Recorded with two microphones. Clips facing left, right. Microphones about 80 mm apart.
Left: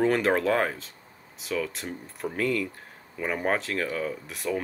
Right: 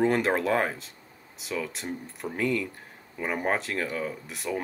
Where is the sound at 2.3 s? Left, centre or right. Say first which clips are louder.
Even; centre.